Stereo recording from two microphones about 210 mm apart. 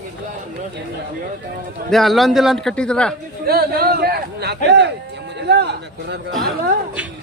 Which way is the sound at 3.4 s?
45° right (ahead or behind).